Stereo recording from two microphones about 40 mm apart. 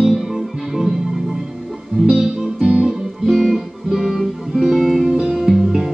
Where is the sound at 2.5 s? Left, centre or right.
Right.